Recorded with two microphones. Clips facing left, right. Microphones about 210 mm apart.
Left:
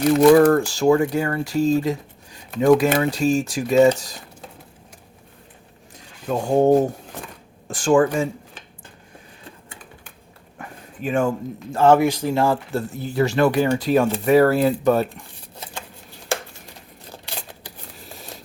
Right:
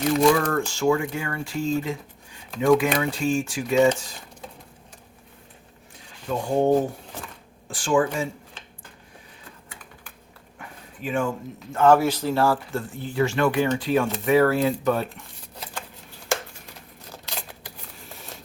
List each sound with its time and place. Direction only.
0.3 s speech: 35° left (ahead or behind)
6.2 s speech: 40° left (ahead or behind)
10.6 s a sound: 45° left (ahead or behind)
11.7 s speech: 30° left (ahead or behind)
11.9 s speech: 15° left (ahead or behind)
12.7 s speech: 40° left (ahead or behind)